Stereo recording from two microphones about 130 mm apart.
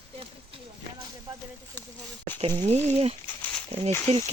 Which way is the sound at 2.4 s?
55° right (ahead or behind).